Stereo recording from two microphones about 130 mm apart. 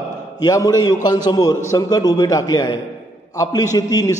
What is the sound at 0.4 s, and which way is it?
A man's voice, 30° left (ahead or behind).